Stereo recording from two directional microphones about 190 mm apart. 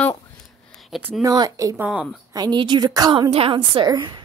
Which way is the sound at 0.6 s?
Centre (ahead or behind).